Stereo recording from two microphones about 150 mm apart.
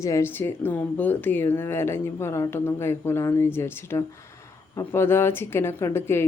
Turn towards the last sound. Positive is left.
turn(degrees=15)  # may be behind; listen again after turning